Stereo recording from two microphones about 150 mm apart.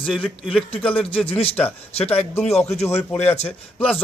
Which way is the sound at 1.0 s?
40° left (ahead or behind).